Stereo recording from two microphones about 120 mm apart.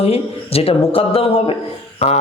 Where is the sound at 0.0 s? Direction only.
55° left (ahead or behind).